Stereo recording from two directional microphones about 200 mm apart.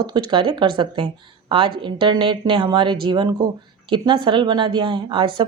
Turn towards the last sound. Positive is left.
turn(degrees=-25)  # may be behind; listen again after turning